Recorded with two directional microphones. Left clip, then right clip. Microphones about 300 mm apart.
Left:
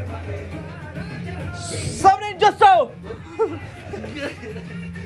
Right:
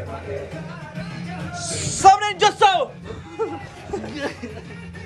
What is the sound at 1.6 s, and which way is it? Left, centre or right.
Music, centre.